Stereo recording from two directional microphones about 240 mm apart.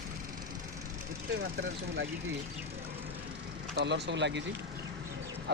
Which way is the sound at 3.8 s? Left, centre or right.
Right.